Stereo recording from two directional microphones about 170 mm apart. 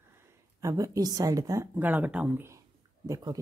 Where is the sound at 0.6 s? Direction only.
20° right (ahead or behind).